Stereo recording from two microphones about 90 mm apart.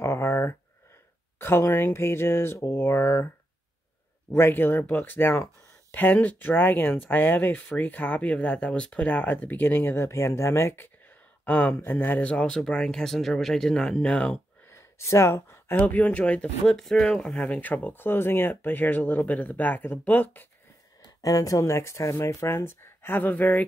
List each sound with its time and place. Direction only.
0.0 s a sound: 30° left (ahead or behind)
1.4 s speech: 30° left (ahead or behind)
4.4 s speech: 25° left (ahead or behind)
11.4 s speech: 20° left (ahead or behind)
14.7 s a sound: 30° left (ahead or behind)
15.7 s speech: 15° left (ahead or behind)
21.2 s speech: 45° left (ahead or behind); by 23.6 s 20° left (ahead or behind)